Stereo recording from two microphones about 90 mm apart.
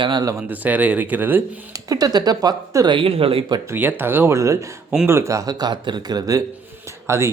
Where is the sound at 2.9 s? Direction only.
85° right.